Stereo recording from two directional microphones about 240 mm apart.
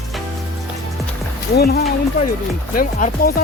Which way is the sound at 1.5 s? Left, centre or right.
Left.